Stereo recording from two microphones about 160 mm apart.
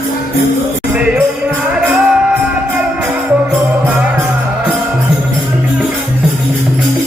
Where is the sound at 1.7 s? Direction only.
5° right (ahead or behind).